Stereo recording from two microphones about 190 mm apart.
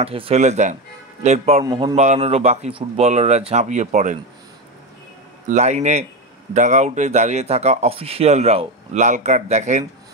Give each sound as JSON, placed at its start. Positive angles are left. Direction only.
{"t": 0.0, "sound": "speech", "side_deg": -30}
{"t": 1.6, "sound": "speech", "side_deg": -20}
{"t": 2.0, "sound": "speech", "side_deg": -35}
{"t": 5.5, "sound": "speech", "side_deg": -35}